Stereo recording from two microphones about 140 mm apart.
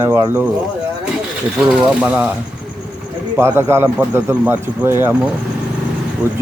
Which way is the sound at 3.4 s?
15° right (ahead or behind).